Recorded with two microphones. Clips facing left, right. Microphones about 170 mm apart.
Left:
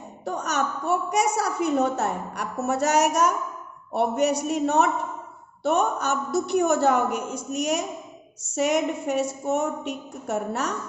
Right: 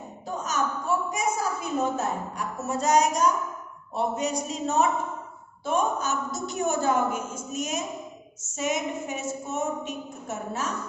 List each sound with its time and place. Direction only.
0.3 s a woman's voice: 70° left (ahead or behind)